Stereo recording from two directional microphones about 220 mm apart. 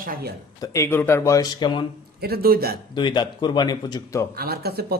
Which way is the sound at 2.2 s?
45° right (ahead or behind).